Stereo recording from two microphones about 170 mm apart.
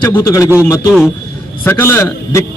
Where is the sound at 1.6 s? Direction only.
15° left (ahead or behind).